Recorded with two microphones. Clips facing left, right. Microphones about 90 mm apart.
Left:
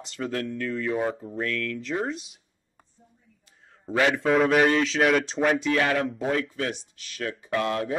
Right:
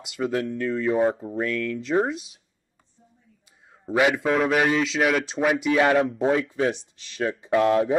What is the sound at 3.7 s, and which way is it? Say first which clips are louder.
Speech: right 2 dB; 15° right (ahead or behind).